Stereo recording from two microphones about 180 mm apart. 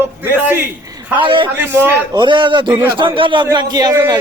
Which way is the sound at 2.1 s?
25° right (ahead or behind).